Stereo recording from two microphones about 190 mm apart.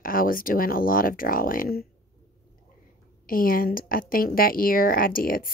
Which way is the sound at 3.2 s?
50° left (ahead or behind).